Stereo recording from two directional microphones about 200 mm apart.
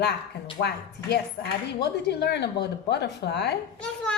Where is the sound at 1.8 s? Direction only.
55° left (ahead or behind).